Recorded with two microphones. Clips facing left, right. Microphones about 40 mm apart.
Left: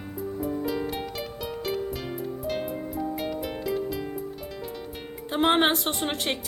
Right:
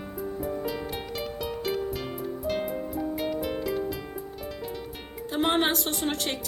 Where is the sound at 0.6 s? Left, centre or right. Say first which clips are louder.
Left 3 dB; centre.